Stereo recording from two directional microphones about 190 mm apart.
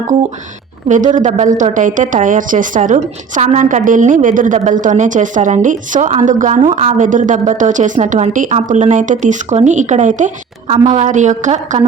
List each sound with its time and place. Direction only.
0.9 s a woman's voice: 40° right (ahead or behind)